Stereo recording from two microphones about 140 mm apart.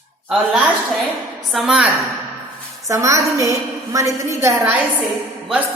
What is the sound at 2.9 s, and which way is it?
A woman's voice, 20° right (ahead or behind).